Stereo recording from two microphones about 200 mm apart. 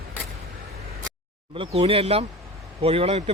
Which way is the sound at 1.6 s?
30° right (ahead or behind).